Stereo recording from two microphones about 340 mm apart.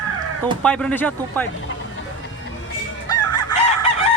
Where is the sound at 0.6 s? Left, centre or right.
Centre.